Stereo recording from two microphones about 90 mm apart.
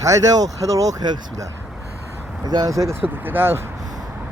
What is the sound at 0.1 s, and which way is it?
Speech, 40° right (ahead or behind).